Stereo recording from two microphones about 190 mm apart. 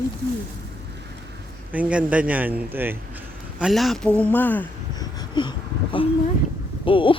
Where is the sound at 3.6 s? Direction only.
Centre (ahead or behind).